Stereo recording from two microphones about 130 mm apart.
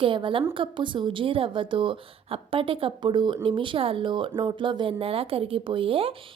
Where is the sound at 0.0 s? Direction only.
40° right (ahead or behind).